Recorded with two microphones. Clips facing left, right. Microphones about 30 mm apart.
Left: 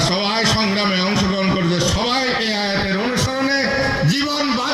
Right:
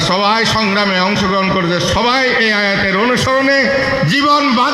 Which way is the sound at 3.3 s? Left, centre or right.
Right.